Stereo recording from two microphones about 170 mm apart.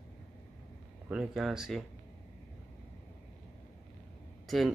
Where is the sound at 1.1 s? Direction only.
5° right (ahead or behind).